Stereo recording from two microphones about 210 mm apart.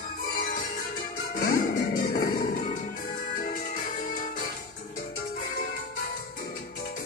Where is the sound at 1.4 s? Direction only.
45° left (ahead or behind).